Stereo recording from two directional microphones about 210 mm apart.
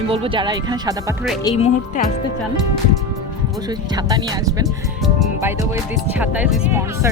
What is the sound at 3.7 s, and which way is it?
Speech, 20° right (ahead or behind).